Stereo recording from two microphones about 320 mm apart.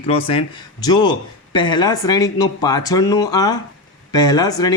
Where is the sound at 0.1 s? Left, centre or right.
Centre.